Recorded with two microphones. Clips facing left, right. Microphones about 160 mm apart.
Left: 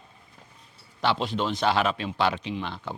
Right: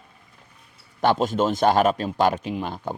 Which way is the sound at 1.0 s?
45° right (ahead or behind).